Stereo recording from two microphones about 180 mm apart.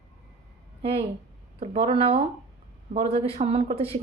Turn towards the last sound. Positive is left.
turn(degrees=-35)  # may be behind; listen again after turning